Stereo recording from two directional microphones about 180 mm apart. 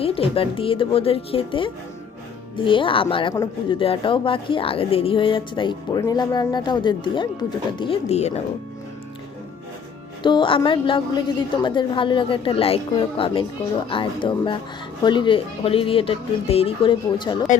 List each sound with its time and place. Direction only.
0.0 s speech: 30° left (ahead or behind)
10.2 s speech: 25° left (ahead or behind)